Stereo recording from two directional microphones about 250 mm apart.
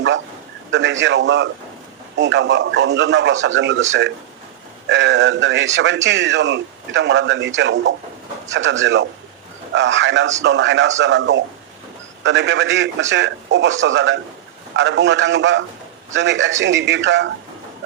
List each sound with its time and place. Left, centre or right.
0.7 s speech: right